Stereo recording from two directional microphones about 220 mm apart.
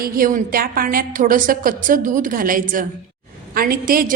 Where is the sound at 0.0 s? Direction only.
40° right (ahead or behind).